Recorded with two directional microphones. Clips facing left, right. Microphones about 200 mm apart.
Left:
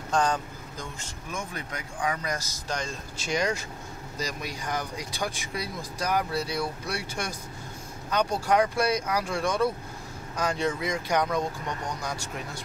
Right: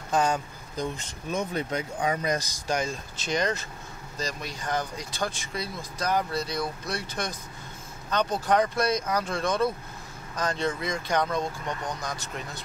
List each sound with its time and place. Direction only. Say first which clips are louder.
0.1 s speech: right 1 dB; 10° right (ahead or behind)
3.2 s speech: even; 10° left (ahead or behind)